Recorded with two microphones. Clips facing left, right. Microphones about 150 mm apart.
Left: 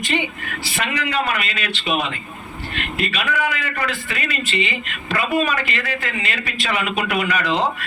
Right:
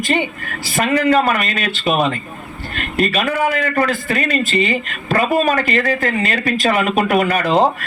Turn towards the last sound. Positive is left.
turn(degrees=-40)  # may be behind; listen again after turning